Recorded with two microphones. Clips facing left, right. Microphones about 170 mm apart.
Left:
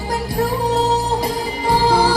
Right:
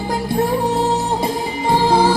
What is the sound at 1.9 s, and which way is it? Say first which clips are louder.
Music: right 2 dB; 25° right (ahead or behind).